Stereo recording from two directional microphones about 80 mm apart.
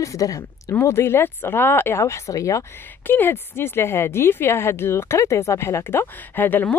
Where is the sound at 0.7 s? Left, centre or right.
Left.